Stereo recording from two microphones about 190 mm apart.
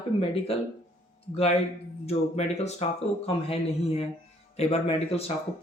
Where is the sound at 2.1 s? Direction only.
35° left (ahead or behind).